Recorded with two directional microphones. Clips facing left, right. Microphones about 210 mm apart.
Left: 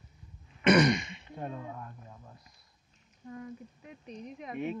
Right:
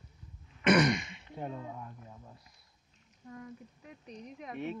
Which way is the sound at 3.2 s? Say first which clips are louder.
Left 4 dB; 5° left (ahead or behind).